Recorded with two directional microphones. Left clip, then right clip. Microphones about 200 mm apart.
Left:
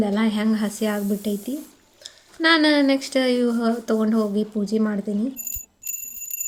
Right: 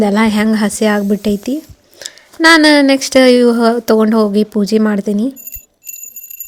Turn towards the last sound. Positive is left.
turn(degrees=-45)  # may be behind; listen again after turning